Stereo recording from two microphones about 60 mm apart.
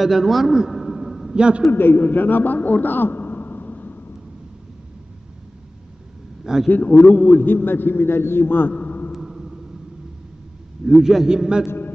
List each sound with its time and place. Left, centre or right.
0.0 s a man's voice: centre
1.3 s a man's voice: centre
1.7 s a man's voice: left
6.4 s a man's voice: centre
6.7 s a man's voice: left
8.7 s a sound: left
9.1 s a sound: centre
10.9 s a man's voice: centre